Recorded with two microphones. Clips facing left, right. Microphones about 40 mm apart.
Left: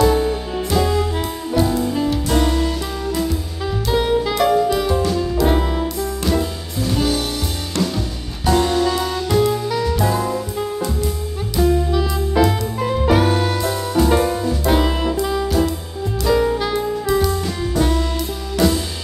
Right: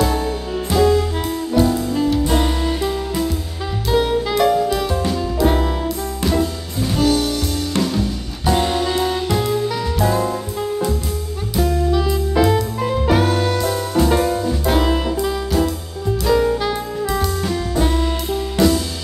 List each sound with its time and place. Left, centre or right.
0.0 s music: centre
8.5 s music: centre
9.3 s music: centre
11.6 s music: centre
12.0 s music: centre
16.3 s saxophone: centre
18.6 s music: centre